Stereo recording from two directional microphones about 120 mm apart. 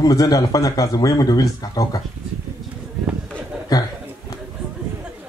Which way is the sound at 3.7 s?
30° left (ahead or behind).